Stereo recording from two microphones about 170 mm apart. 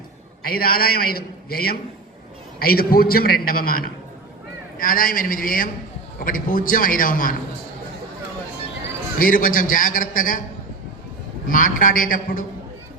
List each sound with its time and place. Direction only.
0.4 s a man's voice: 60° left (ahead or behind)
9.1 s a man's voice: 55° left (ahead or behind)
11.4 s a man's voice: 50° left (ahead or behind)